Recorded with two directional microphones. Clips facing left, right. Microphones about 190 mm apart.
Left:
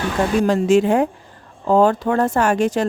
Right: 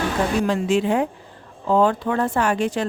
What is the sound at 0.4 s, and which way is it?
Speech, 45° left (ahead or behind).